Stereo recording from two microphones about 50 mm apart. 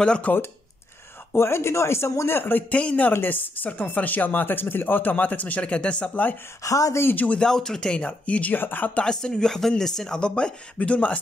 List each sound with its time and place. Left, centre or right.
0.3 s speech: left
1.3 s speech: left
2.2 s speech: left
2.7 s speech: left
3.1 s speech: left
6.6 s speech: left
7.3 s speech: centre
7.9 s speech: left
8.5 s speech: left
8.9 s speech: centre